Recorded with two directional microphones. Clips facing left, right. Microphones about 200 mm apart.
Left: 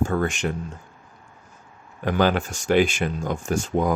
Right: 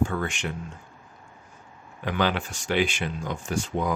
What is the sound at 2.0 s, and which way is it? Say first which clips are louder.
Speech: left 5 dB; 45° left (ahead or behind).